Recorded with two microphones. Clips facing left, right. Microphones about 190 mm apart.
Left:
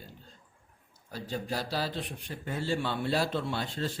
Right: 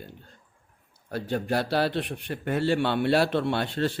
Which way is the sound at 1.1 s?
65° right (ahead or behind).